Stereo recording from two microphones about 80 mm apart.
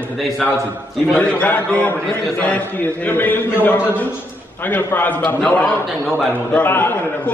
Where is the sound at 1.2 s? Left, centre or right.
Centre.